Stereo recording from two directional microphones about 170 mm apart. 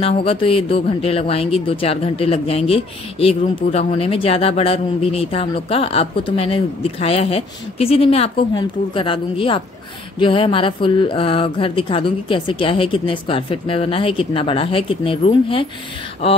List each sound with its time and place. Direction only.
0.0 s speech: 35° left (ahead or behind)